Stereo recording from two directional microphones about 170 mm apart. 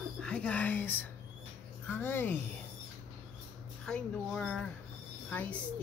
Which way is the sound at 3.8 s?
5° left (ahead or behind).